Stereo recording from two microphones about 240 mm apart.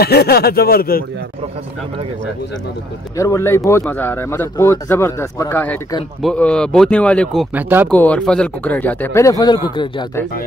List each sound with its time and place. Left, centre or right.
0.0 s speech: left
3.2 s speech: centre
7.5 s speech: centre
7.9 s speech: centre